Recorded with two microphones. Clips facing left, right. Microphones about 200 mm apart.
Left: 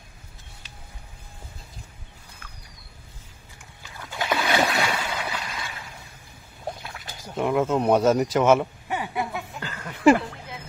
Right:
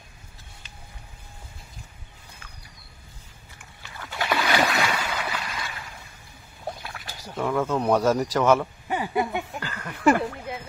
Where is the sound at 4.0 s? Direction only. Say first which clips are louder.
Even; 15° left (ahead or behind).